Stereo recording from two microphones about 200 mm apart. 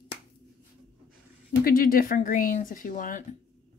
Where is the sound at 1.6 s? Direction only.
45° left (ahead or behind).